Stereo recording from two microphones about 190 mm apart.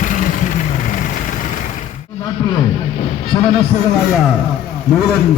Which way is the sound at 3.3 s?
25° left (ahead or behind).